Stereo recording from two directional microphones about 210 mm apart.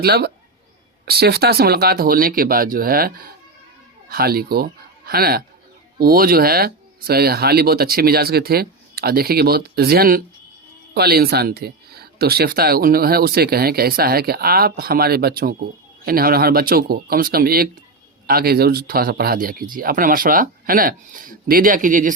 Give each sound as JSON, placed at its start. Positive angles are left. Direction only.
{"t": 0.0, "sound": "speech", "side_deg": -50}
{"t": 4.1, "sound": "speech", "side_deg": -45}